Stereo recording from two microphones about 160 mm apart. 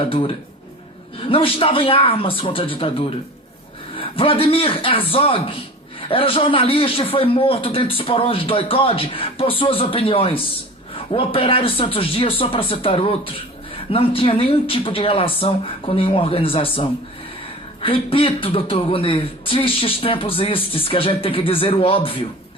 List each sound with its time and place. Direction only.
1.3 s a man's voice: 35° left (ahead or behind)
17.8 s a man's voice: 35° left (ahead or behind)